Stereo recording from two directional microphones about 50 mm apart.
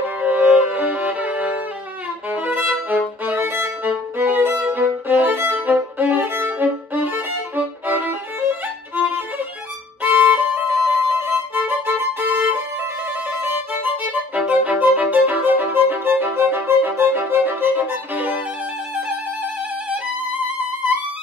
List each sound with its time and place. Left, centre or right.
0.2 s violin: right
2.3 s violin: right
3.3 s violin: right
10.0 s violin: right
11.1 s music: right
14.0 s violin: right
16.1 s music: right
17.0 s violin: right